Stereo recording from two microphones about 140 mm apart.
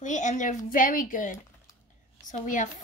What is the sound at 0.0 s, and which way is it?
A woman's voice, 60° left (ahead or behind).